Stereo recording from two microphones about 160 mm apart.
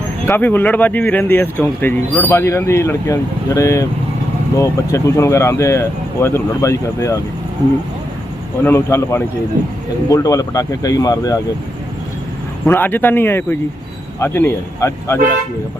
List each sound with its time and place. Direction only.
0.3 s speech: 15° left (ahead or behind)
8.6 s speech: 15° left (ahead or behind)
12.6 s speech: 15° left (ahead or behind)